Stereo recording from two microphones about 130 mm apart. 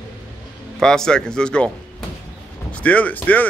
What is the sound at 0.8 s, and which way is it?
Speech, 5° left (ahead or behind).